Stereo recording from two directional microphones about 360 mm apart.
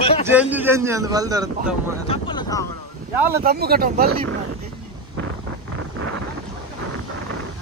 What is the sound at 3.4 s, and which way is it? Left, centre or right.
Speech, right.